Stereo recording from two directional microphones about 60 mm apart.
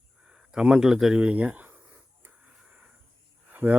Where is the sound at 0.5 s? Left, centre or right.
Centre.